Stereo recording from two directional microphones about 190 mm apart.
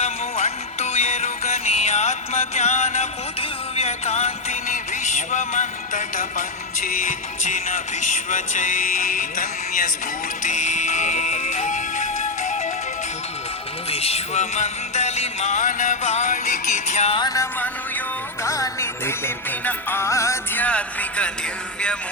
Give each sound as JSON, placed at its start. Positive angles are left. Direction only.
{"t": 0.0, "sound": "music", "side_deg": 35}
{"t": 13.9, "sound": "music", "side_deg": 30}
{"t": 17.2, "sound": "music", "side_deg": 20}